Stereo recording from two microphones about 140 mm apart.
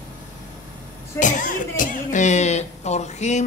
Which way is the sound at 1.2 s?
65° left (ahead or behind).